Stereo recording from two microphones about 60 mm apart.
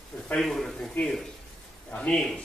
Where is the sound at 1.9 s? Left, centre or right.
Centre.